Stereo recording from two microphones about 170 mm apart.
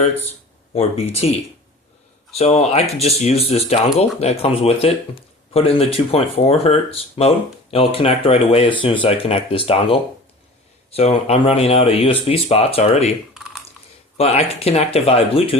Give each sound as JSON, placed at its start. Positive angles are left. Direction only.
{"t": 0.7, "sound": "speech", "side_deg": 35}
{"t": 14.2, "sound": "speech", "side_deg": 35}